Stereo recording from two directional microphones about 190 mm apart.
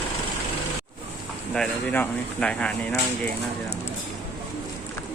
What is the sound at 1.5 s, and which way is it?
Speech, 5° left (ahead or behind).